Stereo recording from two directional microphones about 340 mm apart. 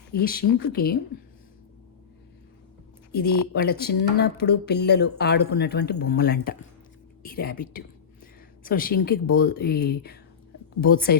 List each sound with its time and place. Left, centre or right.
0.2 s speech: left
3.5 s speech: left